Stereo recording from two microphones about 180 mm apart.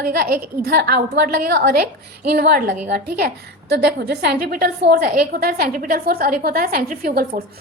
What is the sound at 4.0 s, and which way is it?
A woman's voice, 60° right (ahead or behind).